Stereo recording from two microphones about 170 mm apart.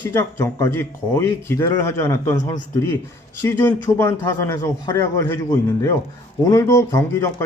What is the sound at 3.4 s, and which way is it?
A man's voice, 15° left (ahead or behind).